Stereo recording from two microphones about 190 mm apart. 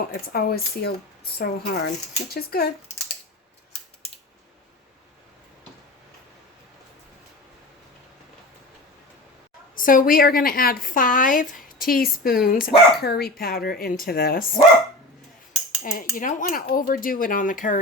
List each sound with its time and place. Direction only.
0.1 s a woman's voice: 55° left (ahead or behind)
9.7 s a woman's voice: 45° left (ahead or behind)
15.8 s a woman's voice: 45° left (ahead or behind)